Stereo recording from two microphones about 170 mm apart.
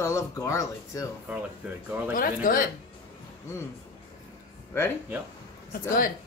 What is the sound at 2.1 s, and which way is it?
Speech, 55° left (ahead or behind).